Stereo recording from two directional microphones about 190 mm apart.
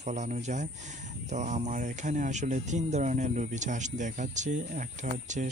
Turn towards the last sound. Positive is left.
turn(degrees=-40)  # may be behind; listen again after turning